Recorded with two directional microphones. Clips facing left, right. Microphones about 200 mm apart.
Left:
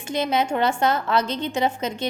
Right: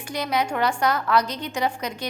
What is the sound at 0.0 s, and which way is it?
A woman's voice, 25° left (ahead or behind).